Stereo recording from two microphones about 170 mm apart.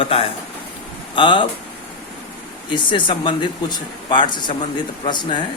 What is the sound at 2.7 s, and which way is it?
Speech, 30° left (ahead or behind).